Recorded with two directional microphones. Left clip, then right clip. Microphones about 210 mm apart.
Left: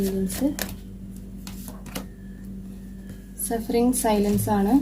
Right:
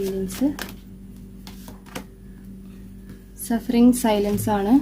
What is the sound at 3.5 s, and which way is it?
A woman's voice, 35° right (ahead or behind).